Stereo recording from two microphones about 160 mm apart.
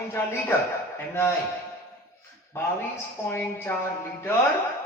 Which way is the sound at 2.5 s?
15° left (ahead or behind).